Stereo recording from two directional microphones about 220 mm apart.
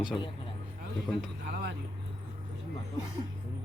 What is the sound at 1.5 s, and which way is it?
Vehicle, 45° right (ahead or behind).